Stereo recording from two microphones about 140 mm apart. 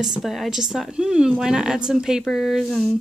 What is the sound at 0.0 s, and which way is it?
A woman's voice, 5° right (ahead or behind).